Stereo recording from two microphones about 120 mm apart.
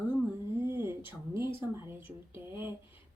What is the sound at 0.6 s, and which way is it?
Speech, 20° right (ahead or behind).